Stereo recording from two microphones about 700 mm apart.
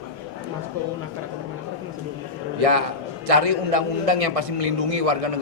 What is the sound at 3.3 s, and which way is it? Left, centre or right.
A man's voice, right.